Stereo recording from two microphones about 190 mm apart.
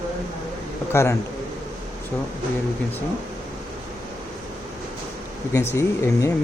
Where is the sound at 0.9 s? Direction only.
15° left (ahead or behind).